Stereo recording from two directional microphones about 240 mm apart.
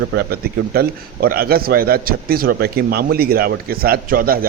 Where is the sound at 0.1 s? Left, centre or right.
Right.